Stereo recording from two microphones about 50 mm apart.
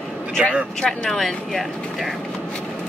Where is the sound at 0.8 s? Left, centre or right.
Centre.